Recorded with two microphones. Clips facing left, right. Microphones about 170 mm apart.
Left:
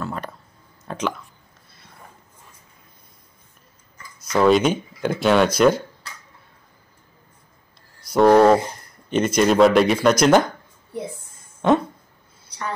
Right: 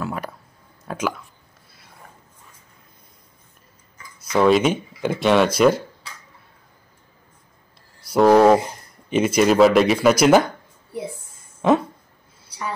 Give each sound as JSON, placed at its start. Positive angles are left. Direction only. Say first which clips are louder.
{"t": 0.0, "sound": "a sound", "louder": "right 1 dB", "side_deg": -10}
{"t": 0.8, "sound": "speech", "louder": "right 1 dB", "side_deg": -5}
{"t": 4.3, "sound": "speech", "louder": "even", "side_deg": 0}
{"t": 8.0, "sound": "speech", "louder": "even", "side_deg": -5}